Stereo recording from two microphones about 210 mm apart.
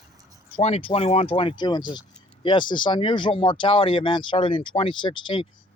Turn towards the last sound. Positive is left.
turn(degrees=20)  # may be behind; listen again after turning